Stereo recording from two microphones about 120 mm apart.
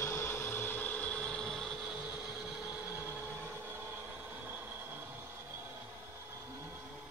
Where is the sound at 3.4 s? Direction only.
20° right (ahead or behind).